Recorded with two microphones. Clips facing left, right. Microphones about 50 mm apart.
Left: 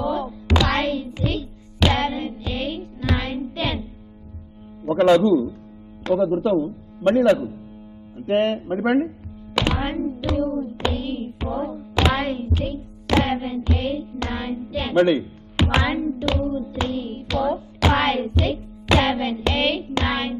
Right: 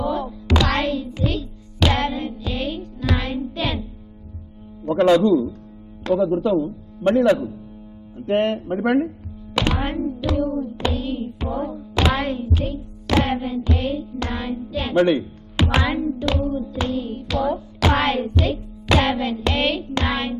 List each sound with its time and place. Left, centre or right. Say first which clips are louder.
0.0 s music: even; centre
4.8 s a man's voice: even; centre
9.7 s thunk: right 1 dB; centre
10.3 s hands: even; centre
11.0 s music: right 1 dB; centre
11.4 s music: left 1 dB; centre
12.4 s music: right 1 dB; centre
16.3 s hands: even; centre
16.7 s music: right 1 dB; centre
17.3 s music: even; centre